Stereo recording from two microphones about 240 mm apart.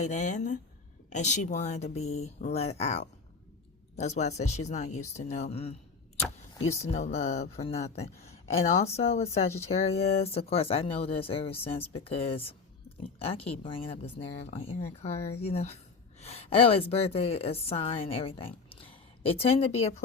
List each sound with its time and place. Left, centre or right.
0.0 s a woman's voice: left